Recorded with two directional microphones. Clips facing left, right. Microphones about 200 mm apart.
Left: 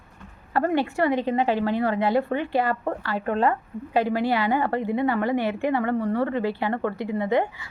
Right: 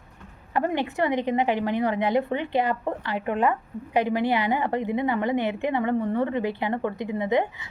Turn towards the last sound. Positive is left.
turn(degrees=-20)  # may be behind; listen again after turning